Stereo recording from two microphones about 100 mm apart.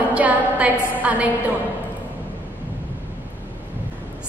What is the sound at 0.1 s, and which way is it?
A woman's voice, 15° right (ahead or behind).